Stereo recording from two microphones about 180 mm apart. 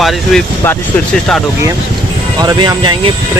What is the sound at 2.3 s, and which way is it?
Speech, 25° right (ahead or behind).